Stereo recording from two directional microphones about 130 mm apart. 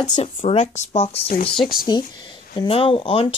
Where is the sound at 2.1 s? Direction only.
40° left (ahead or behind).